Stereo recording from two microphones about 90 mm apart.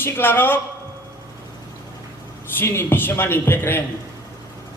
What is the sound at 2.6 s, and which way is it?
A man's voice, 25° left (ahead or behind).